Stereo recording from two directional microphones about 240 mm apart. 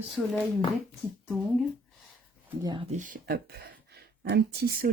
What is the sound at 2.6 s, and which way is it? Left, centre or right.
Speech, centre.